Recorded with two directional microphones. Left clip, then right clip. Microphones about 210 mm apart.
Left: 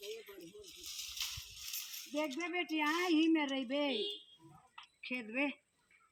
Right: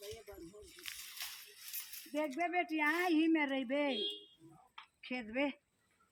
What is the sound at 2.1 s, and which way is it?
Speech, 5° right (ahead or behind).